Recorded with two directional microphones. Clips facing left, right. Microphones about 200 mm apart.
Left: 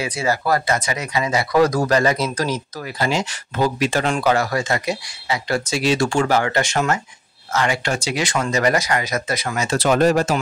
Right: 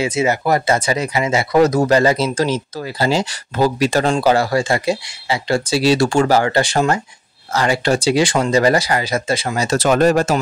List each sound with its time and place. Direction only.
0.0 s speech: 20° right (ahead or behind); by 10.4 s 50° right (ahead or behind)